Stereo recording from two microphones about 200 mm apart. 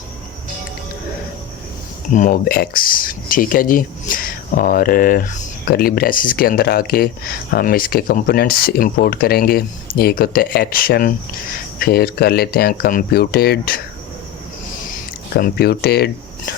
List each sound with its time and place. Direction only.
2.1 s speech: 40° left (ahead or behind)
15.4 s speech: 50° left (ahead or behind)